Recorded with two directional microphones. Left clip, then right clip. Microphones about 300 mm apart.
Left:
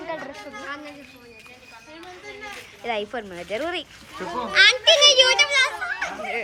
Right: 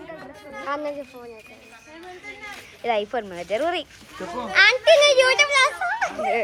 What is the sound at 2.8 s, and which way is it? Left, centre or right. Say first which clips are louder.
Speech: right 4 dB; centre.